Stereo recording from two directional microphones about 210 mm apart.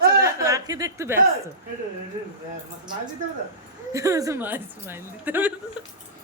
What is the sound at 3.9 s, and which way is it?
A woman's voice, 15° right (ahead or behind).